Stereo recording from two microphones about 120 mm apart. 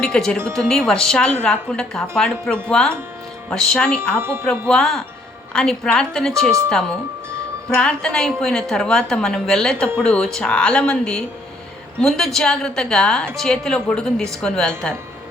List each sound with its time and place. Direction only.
0.0 s a woman's voice: 5° left (ahead or behind)
4.2 s speech: 20° right (ahead or behind)
4.7 s a woman's voice: 5° left (ahead or behind)
7.8 s a woman's voice: 5° left (ahead or behind)